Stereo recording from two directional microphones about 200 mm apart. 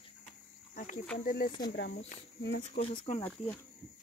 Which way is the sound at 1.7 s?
55° left (ahead or behind).